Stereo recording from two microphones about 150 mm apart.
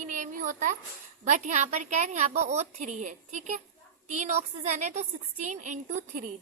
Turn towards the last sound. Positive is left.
turn(degrees=-55)  # may be behind; listen again after turning